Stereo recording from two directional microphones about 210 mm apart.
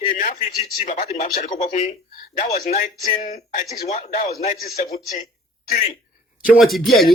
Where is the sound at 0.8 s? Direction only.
35° left (ahead or behind).